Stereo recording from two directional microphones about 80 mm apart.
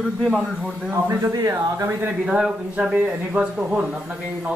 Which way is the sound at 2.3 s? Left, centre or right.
Centre.